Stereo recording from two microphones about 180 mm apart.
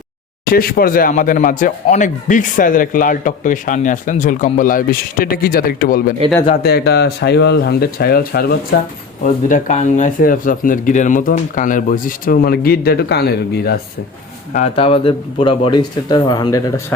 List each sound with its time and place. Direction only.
0.4 s speech: 55° left (ahead or behind)
9.2 s speech: 40° left (ahead or behind); by 13.7 s 60° left (ahead or behind)
14.5 s speech: 35° left (ahead or behind)